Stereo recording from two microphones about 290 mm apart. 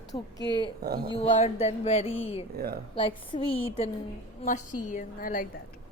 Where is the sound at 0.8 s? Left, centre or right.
Right.